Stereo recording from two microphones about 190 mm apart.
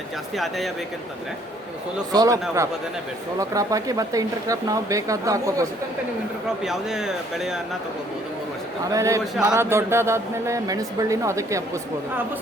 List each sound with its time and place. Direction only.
0.3 s speech: centre (ahead or behind)
2.1 s speech: 20° right (ahead or behind)
3.5 s speech: 15° right (ahead or behind)
6.6 s speech: centre (ahead or behind)
8.9 s speech: 15° right (ahead or behind)